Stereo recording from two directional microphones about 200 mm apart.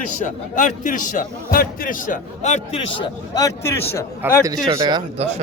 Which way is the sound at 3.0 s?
15° left (ahead or behind).